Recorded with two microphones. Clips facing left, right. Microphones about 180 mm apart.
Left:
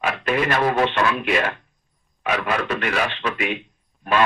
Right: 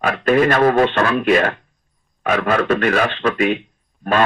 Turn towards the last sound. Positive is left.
turn(degrees=-45)  # may be behind; listen again after turning